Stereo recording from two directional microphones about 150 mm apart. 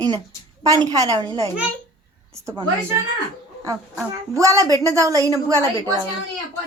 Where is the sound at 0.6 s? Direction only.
25° right (ahead or behind).